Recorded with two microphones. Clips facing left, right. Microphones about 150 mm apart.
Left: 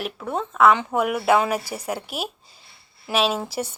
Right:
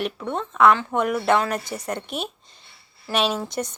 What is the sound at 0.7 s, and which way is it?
Speech, 15° left (ahead or behind).